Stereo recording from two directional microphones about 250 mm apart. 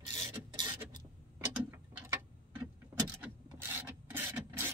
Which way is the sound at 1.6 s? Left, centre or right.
Centre.